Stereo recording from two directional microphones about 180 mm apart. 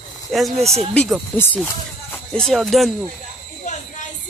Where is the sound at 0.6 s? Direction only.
35° right (ahead or behind).